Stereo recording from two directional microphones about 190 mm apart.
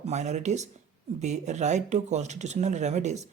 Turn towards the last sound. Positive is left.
turn(degrees=-35)  # may be behind; listen again after turning